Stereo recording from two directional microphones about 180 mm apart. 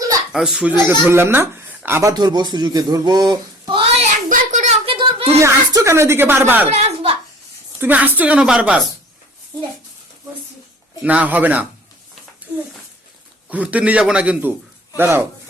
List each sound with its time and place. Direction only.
0.3 s speech: 5° right (ahead or behind); by 3.8 s 25° right (ahead or behind)
4.3 s a sound: 45° right (ahead or behind)
5.4 s speech: 15° right (ahead or behind)
6.7 s a sound: 35° right (ahead or behind)
7.8 s speech: 10° right (ahead or behind)
11.0 s speech: 10° right (ahead or behind)
12.5 s a child's voice: 10° left (ahead or behind)
13.5 s speech: 10° right (ahead or behind)